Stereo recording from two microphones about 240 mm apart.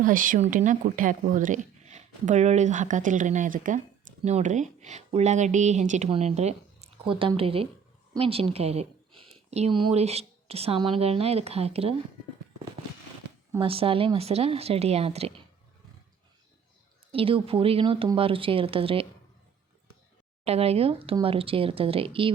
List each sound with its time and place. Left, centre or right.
0.0 s speech: right
13.6 s speech: right
17.1 s speech: right
20.4 s speech: right